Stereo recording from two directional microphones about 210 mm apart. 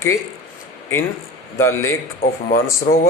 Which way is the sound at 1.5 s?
10° left (ahead or behind).